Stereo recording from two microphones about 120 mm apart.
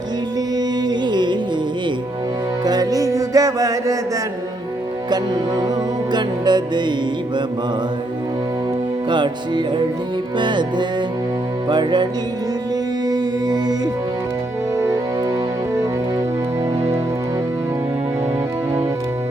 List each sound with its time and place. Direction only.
0.5 s music: 35° right (ahead or behind)
2.6 s music: 30° right (ahead or behind)
5.1 s music: 35° right (ahead or behind)
9.0 s music: 40° right (ahead or behind)
13.1 s music: 35° right (ahead or behind)
14.8 s music: 30° right (ahead or behind)